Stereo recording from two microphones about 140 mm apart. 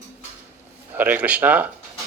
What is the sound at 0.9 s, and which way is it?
Speech, 10° right (ahead or behind).